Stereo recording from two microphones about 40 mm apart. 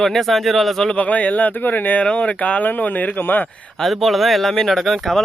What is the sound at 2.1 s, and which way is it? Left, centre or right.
Speech, left.